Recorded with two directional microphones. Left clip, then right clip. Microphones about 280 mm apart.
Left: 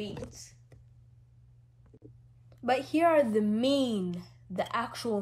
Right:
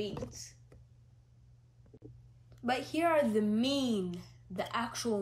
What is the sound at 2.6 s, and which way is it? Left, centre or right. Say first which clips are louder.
A woman's voice: left 6 dB; left.